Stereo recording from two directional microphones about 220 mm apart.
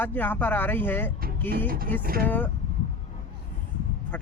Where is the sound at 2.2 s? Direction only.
10° left (ahead or behind).